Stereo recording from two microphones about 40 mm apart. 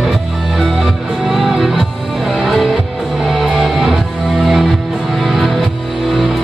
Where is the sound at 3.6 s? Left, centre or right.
Centre.